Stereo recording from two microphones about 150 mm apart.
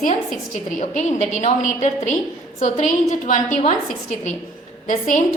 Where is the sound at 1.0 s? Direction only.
50° left (ahead or behind).